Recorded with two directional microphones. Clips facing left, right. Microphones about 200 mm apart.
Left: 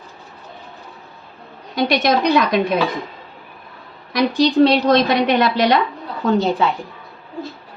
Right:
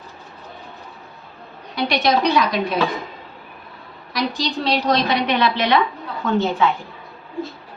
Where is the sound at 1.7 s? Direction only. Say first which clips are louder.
Left 2 dB; 50° left (ahead or behind).